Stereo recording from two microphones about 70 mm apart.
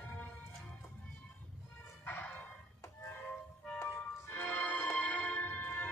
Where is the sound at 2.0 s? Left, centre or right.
Left.